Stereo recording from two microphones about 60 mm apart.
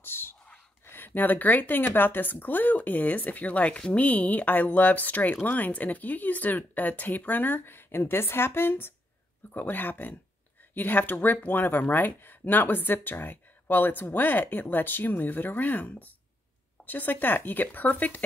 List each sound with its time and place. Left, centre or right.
0.0 s whispering: left
0.8 s speech: left